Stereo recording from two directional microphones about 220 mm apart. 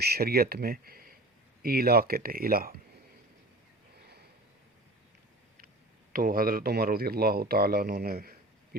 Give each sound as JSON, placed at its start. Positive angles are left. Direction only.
{"t": 0.0, "sound": "speech", "side_deg": -45}
{"t": 6.1, "sound": "speech", "side_deg": -40}